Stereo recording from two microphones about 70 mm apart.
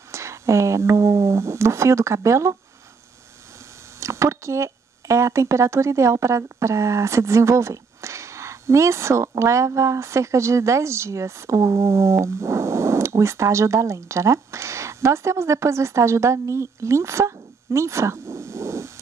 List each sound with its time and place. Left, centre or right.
0.1 s speech: right
4.0 s speech: right